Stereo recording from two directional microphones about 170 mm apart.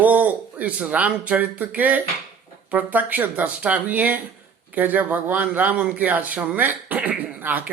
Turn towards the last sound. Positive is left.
turn(degrees=-10)  # may be behind; listen again after turning